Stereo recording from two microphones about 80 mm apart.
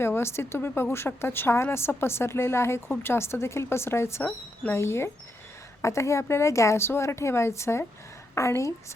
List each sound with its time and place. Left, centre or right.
0.0 s speech: left